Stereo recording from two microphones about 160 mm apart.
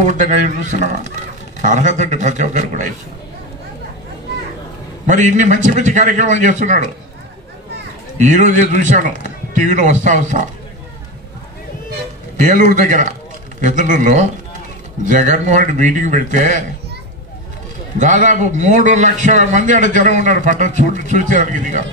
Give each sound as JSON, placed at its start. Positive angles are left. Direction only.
{"t": 0.0, "sound": "a man's voice", "side_deg": -50}
{"t": 5.0, "sound": "a man's voice", "side_deg": -50}
{"t": 8.2, "sound": "a man's voice", "side_deg": -50}
{"t": 12.4, "sound": "a man's voice", "side_deg": -55}
{"t": 17.9, "sound": "a man's voice", "side_deg": -50}